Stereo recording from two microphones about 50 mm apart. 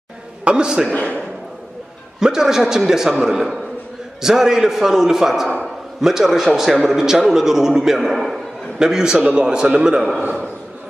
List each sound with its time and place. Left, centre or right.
0.5 s a man's voice: centre
0.8 s a man's voice: left
2.1 s a man's voice: centre